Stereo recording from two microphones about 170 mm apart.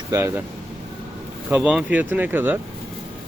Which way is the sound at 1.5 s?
10° right (ahead or behind).